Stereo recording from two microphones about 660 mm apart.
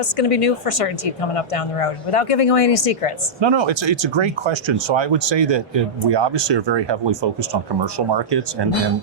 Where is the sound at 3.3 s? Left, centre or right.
Right.